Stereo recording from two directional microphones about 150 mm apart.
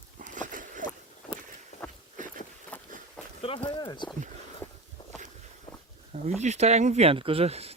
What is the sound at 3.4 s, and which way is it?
Speech, 35° left (ahead or behind).